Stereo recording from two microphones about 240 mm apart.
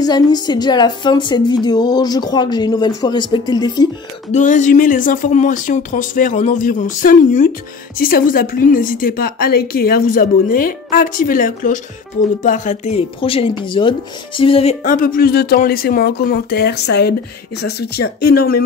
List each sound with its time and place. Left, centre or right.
0.0 s a woman's voice: centre
4.3 s a woman's voice: left
14.8 s a woman's voice: left